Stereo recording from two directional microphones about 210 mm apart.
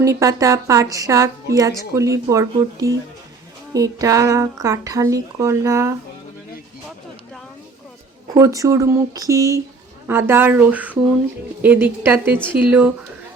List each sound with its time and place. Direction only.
0.0 s a woman's voice: 15° right (ahead or behind)
8.4 s a woman's voice: 15° right (ahead or behind)